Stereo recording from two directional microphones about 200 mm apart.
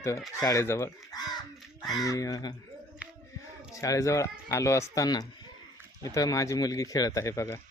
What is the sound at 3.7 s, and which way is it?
Speech, 15° left (ahead or behind).